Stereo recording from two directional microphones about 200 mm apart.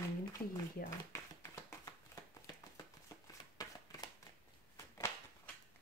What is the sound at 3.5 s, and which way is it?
Shuffling cards, 15° left (ahead or behind).